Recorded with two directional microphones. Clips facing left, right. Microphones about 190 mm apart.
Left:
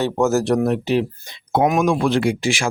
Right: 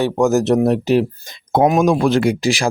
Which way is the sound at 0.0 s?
15° right (ahead or behind).